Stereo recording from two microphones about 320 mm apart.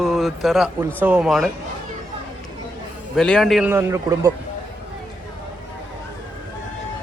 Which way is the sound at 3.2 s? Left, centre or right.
Centre.